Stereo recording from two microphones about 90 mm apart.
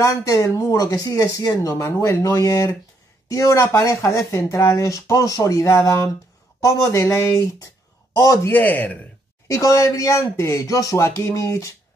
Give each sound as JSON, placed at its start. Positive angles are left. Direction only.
{"t": 0.0, "sound": "speech", "side_deg": 40}
{"t": 8.5, "sound": "a man's voice", "side_deg": 20}
{"t": 9.5, "sound": "speech", "side_deg": 35}